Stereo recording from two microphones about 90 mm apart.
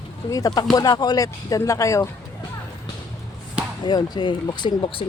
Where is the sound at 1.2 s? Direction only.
40° left (ahead or behind).